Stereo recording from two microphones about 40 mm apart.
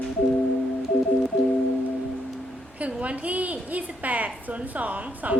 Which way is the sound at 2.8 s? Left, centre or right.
Right.